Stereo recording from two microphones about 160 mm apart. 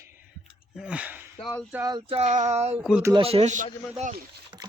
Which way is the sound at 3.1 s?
35° right (ahead or behind).